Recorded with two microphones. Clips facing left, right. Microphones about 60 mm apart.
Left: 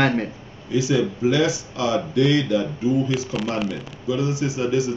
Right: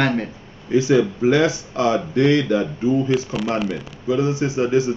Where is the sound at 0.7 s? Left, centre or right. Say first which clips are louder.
Right 4 dB; right.